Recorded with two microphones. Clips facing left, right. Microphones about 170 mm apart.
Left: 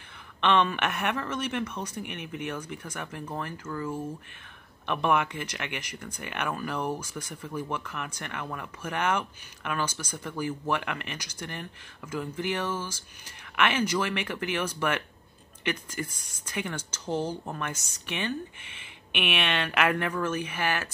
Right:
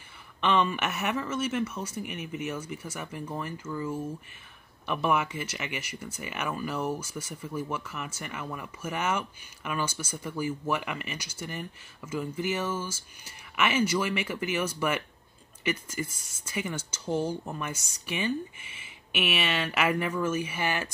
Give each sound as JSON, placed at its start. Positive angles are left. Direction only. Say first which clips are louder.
{"t": 0.4, "sound": "speech", "louder": "left 1 dB", "side_deg": -10}